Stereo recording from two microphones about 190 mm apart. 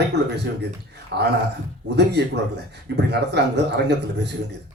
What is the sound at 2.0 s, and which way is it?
A man's voice, 60° right (ahead or behind).